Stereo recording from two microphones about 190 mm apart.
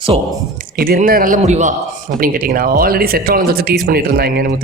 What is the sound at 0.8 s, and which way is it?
Speech, 50° right (ahead or behind).